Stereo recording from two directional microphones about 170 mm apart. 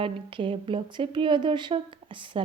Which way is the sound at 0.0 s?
30° right (ahead or behind).